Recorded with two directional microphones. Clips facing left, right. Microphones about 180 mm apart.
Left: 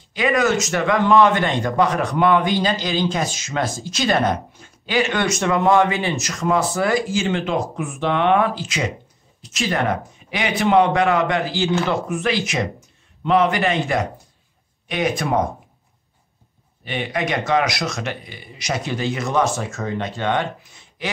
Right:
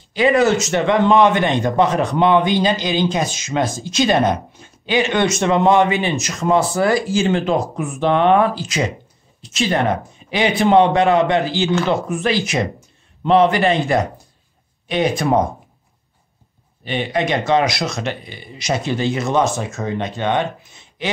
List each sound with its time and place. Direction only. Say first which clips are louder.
0.1 s a man's voice: right 4 dB; 30° right (ahead or behind)
9.7 s a man's voice: right 2 dB; 30° right (ahead or behind)
12.2 s a man's voice: right 3 dB; 35° right (ahead or behind)
16.8 s a man's voice: right 4 dB; 30° right (ahead or behind)